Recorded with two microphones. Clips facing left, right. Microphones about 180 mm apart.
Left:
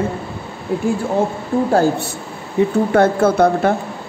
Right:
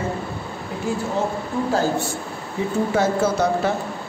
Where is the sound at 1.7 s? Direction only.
60° left (ahead or behind).